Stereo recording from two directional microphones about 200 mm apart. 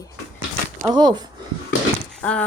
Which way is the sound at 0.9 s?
20° right (ahead or behind).